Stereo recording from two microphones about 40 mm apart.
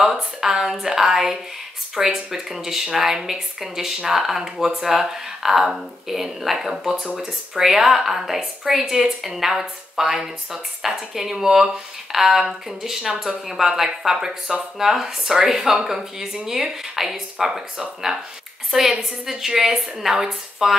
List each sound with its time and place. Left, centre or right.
0.0 s a woman's voice: centre